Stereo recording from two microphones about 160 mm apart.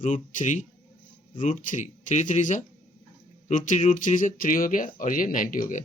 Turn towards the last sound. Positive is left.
turn(degrees=60)  # may be behind; listen again after turning